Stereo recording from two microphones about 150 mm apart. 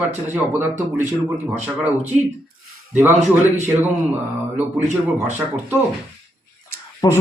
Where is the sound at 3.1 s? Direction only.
50° right (ahead or behind).